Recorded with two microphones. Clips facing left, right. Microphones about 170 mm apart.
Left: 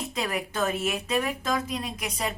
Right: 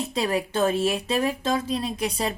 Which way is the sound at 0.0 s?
30° right (ahead or behind).